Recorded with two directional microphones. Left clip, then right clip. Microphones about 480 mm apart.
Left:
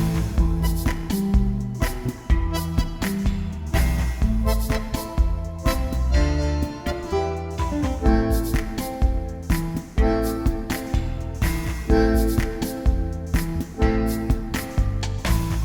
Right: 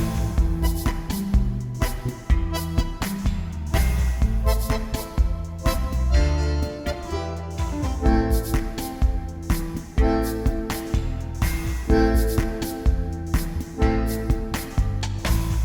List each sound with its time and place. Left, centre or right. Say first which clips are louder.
0.3 s music: left 1 dB; centre